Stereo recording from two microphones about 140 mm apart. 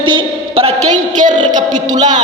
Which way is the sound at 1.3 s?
60° right (ahead or behind).